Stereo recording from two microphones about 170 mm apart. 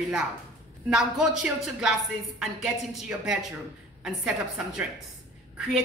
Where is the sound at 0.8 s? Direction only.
5° right (ahead or behind).